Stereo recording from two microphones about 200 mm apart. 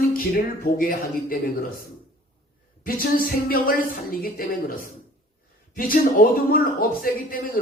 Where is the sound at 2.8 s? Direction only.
45° left (ahead or behind).